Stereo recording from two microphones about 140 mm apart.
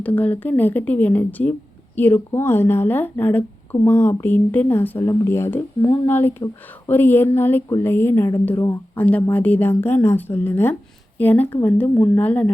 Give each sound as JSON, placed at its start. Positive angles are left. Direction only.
{"t": 0.0, "sound": "a woman's voice", "side_deg": 10}